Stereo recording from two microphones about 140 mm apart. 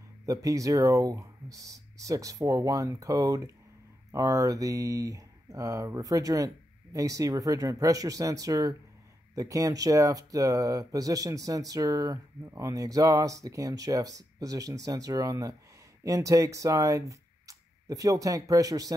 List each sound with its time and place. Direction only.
0.3 s speech: 25° right (ahead or behind)